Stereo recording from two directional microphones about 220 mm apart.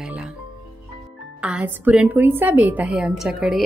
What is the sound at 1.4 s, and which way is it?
A woman's voice, 5° right (ahead or behind).